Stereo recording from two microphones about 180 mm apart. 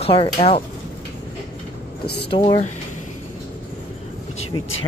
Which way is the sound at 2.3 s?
30° left (ahead or behind).